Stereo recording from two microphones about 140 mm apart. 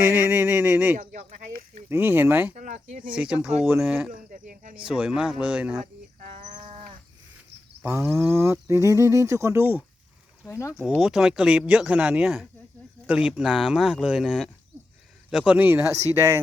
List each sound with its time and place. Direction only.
0.0 s speech: 20° right (ahead or behind)
2.6 s speech: 60° right (ahead or behind)
3.7 s speech: 5° right (ahead or behind)
4.1 s a sound: 70° right (ahead or behind)
4.9 s speech: 5° right (ahead or behind)
5.8 s livestock: 55° right (ahead or behind)
7.8 s speech: 15° right (ahead or behind)
10.4 s speech: 20° left (ahead or behind)
10.8 s speech: centre (ahead or behind); by 16.4 s 20° right (ahead or behind)